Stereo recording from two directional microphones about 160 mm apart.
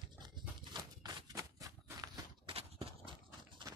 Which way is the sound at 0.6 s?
25° right (ahead or behind).